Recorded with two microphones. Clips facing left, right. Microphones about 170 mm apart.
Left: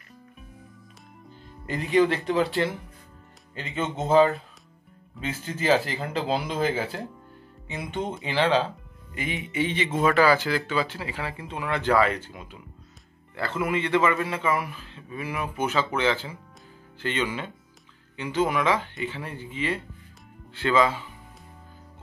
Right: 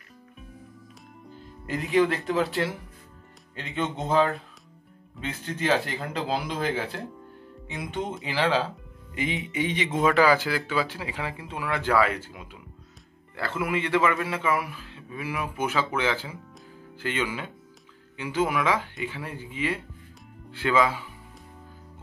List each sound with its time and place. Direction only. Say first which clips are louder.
1.7 s speech: left 1 dB; centre (ahead or behind)
9.1 s speech: right 1 dB; 20° right (ahead or behind)